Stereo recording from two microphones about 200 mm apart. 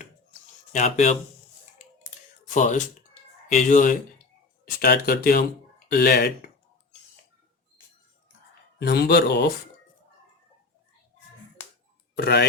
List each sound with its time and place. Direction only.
0.7 s speech: 35° left (ahead or behind)
2.5 s speech: 40° left (ahead or behind)
4.8 s speech: 50° left (ahead or behind)
8.8 s speech: 55° left (ahead or behind)
12.1 s speech: 55° left (ahead or behind)